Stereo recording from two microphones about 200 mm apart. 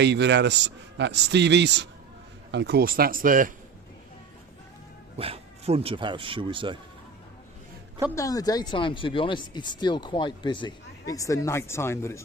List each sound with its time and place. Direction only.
0.0 s a man's voice: 60° right (ahead or behind); by 3.5 s 45° right (ahead or behind)
5.1 s speech: 30° right (ahead or behind)
8.1 s speech: 15° left (ahead or behind)